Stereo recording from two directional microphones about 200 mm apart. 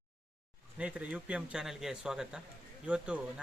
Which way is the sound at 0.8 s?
5° right (ahead or behind).